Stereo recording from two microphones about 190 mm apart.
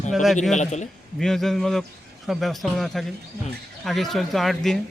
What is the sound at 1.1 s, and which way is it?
Speech, centre (ahead or behind).